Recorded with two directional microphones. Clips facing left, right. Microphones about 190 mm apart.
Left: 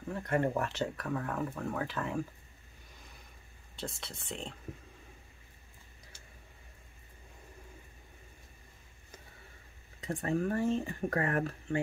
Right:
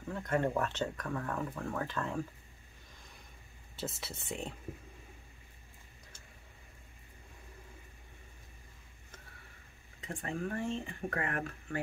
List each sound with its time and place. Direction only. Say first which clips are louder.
0.1 s speech: left 1 dB; 5° left (ahead or behind)
3.7 s speech: right 1 dB; 5° right (ahead or behind)
10.2 s speech: left 6 dB; 40° left (ahead or behind)